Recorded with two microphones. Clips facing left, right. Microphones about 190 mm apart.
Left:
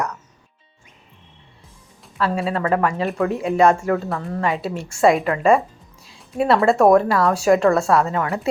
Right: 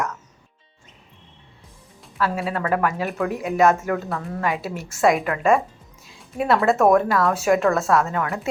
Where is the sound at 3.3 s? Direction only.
30° left (ahead or behind).